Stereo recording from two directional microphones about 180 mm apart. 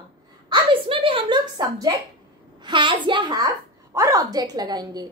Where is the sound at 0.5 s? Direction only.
30° right (ahead or behind).